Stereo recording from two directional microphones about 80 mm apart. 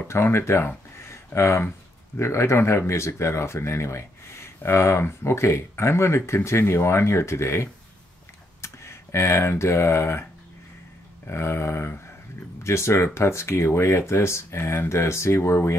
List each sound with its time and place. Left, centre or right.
0.1 s speech: left
11.2 s speech: left